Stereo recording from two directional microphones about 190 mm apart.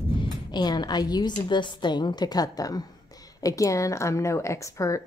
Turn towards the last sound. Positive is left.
turn(degrees=15)  # may be behind; listen again after turning